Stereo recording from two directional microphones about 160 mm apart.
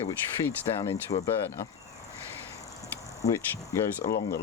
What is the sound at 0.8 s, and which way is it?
Speech, 20° left (ahead or behind).